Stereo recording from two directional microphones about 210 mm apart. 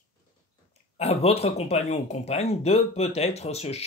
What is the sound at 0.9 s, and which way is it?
Speech, 30° left (ahead or behind).